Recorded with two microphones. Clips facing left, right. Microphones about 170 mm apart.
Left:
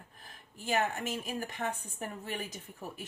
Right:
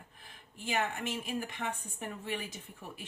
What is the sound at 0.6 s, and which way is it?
A woman's voice, 40° left (ahead or behind).